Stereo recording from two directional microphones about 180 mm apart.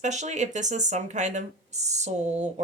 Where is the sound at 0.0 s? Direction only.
40° right (ahead or behind).